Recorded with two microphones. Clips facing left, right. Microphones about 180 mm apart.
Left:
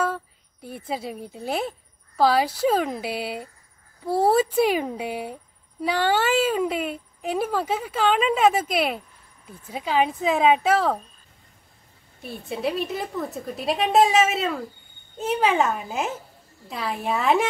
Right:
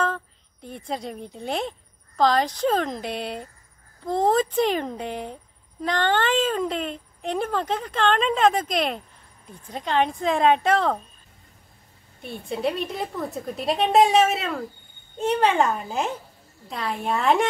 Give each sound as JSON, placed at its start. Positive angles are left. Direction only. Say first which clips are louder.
{"t": 0.0, "sound": "a woman's voice", "louder": "even", "side_deg": 10}
{"t": 12.2, "sound": "a woman's voice", "louder": "right 1 dB", "side_deg": 0}